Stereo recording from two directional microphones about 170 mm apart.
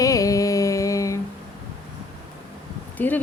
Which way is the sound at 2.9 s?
10° left (ahead or behind).